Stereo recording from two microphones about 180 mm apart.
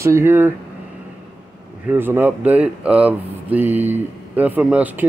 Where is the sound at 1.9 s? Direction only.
10° right (ahead or behind).